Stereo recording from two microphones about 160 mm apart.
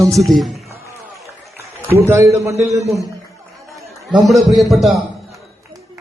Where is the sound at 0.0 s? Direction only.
20° right (ahead or behind).